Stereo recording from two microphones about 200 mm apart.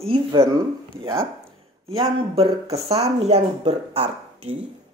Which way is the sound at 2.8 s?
30° right (ahead or behind).